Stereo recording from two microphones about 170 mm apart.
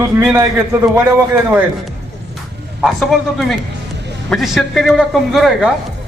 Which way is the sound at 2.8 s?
Centre (ahead or behind).